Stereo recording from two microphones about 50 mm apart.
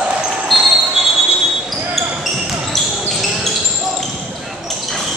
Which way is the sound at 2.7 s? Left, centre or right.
Centre.